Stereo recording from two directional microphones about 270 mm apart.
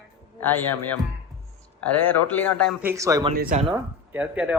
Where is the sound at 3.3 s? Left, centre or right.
Right.